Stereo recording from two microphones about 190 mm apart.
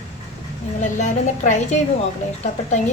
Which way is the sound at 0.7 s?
40° left (ahead or behind).